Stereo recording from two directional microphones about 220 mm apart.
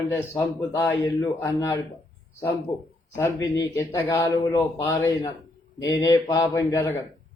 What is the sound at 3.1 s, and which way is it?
A man's voice, 15° left (ahead or behind).